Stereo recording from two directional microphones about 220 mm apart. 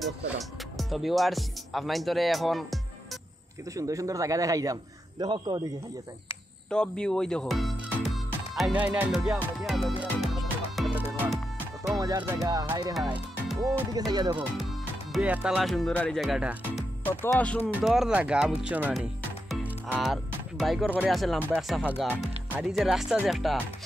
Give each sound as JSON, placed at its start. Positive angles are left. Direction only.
{"t": 0.0, "sound": "speech", "side_deg": 0}
{"t": 3.7, "sound": "a man's voice", "side_deg": -15}
{"t": 6.7, "sound": "speech", "side_deg": 5}
{"t": 9.6, "sound": "music", "side_deg": 0}
{"t": 11.9, "sound": "a man's voice", "side_deg": -15}
{"t": 12.9, "sound": "speech", "side_deg": 0}
{"t": 13.9, "sound": "a man's voice", "side_deg": -15}
{"t": 17.0, "sound": "music", "side_deg": 10}
{"t": 17.7, "sound": "speech", "side_deg": 0}